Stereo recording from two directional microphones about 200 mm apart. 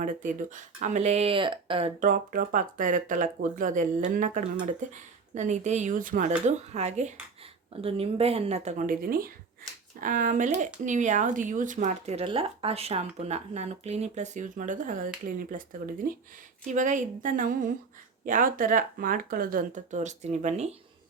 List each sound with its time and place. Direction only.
0.0 s speech: 40° right (ahead or behind)
2.0 s speech: 40° right (ahead or behind)
16.6 s speech: 40° right (ahead or behind)